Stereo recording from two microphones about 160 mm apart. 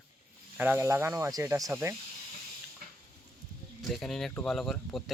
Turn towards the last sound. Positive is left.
turn(degrees=0)  # may be behind; listen again after turning